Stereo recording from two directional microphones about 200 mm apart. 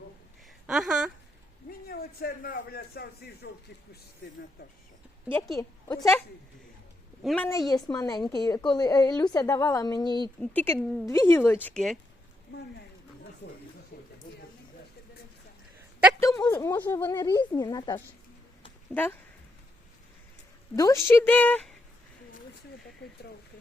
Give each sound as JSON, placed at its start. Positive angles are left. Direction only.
{"t": 0.7, "sound": "speech", "side_deg": -5}
{"t": 1.9, "sound": "speech", "side_deg": 50}
{"t": 5.5, "sound": "speech", "side_deg": 15}
{"t": 7.3, "sound": "speech", "side_deg": 5}
{"t": 7.7, "sound": "a woman's voice", "side_deg": 20}
{"t": 10.4, "sound": "speech", "side_deg": 10}
{"t": 13.9, "sound": "a sound", "side_deg": 50}
{"t": 16.2, "sound": "speech", "side_deg": 15}
{"t": 18.9, "sound": "speech", "side_deg": 5}
{"t": 20.7, "sound": "speech", "side_deg": 15}